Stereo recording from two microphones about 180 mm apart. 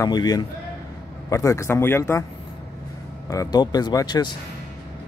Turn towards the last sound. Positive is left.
turn(degrees=25)  # may be behind; listen again after turning